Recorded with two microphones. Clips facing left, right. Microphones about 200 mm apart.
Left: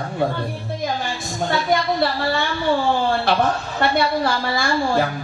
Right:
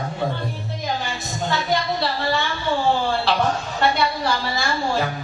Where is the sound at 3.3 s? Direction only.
50° left (ahead or behind).